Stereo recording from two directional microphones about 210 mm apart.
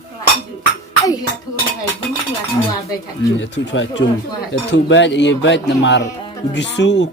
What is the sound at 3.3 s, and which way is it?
Speech, 60° left (ahead or behind).